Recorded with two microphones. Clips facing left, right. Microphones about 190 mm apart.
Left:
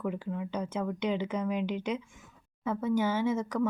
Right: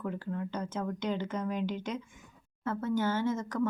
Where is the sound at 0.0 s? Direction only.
5° left (ahead or behind).